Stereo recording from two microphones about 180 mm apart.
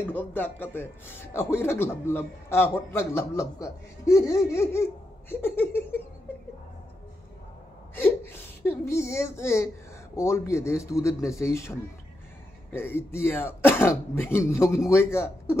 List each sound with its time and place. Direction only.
0.1 s a man's voice: 10° left (ahead or behind)
7.9 s a man's voice: 10° left (ahead or behind)
12.7 s a man's voice: 10° left (ahead or behind)